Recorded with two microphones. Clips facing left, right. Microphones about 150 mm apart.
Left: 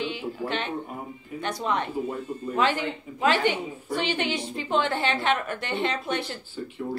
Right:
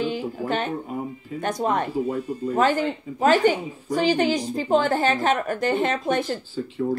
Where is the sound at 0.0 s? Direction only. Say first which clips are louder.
Right 4 dB; 40° right (ahead or behind).